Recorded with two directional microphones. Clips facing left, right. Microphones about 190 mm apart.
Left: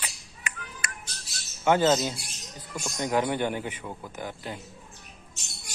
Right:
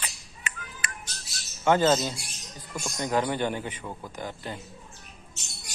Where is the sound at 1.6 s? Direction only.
15° left (ahead or behind).